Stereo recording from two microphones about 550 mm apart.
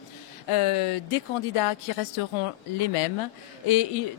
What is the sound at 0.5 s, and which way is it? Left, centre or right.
Speech, left.